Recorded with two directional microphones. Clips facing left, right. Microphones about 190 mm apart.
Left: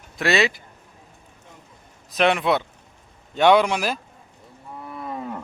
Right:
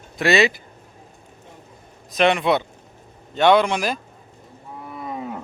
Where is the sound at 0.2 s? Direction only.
Centre (ahead or behind).